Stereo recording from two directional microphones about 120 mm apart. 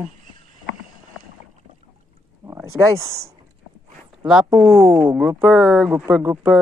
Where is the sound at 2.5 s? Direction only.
25° right (ahead or behind).